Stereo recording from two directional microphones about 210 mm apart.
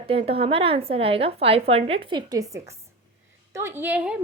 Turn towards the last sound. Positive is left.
turn(degrees=-5)  # may be behind; listen again after turning